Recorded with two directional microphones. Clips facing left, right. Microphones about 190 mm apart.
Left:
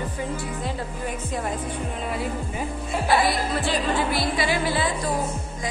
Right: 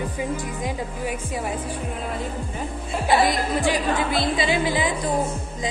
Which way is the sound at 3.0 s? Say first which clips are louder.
Right 2 dB; 15° right (ahead or behind).